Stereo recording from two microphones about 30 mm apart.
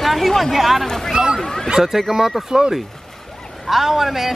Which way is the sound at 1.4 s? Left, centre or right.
Centre.